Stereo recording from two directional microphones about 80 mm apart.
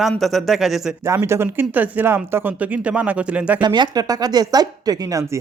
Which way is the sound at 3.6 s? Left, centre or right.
Right.